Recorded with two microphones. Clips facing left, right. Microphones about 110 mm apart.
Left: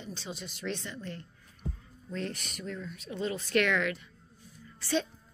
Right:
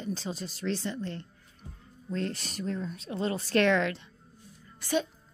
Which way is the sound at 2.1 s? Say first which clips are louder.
Right 4 dB; 35° right (ahead or behind).